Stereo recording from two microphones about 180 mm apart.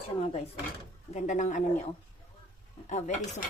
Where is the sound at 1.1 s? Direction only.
40° left (ahead or behind).